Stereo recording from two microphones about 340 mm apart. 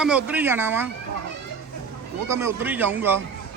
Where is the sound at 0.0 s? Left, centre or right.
Centre.